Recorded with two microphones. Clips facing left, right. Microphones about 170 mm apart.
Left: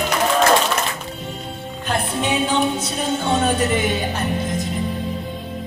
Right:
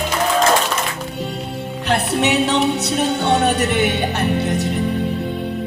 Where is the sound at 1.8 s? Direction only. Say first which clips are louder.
Right 4 dB; 75° right (ahead or behind).